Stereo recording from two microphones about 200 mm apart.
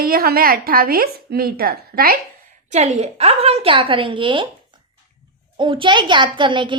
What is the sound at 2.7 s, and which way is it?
A woman's voice, 35° right (ahead or behind).